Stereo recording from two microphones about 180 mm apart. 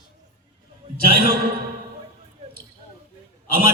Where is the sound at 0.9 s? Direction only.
55° right (ahead or behind).